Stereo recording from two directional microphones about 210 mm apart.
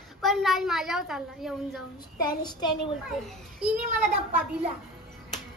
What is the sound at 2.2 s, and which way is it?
Speech, 20° left (ahead or behind).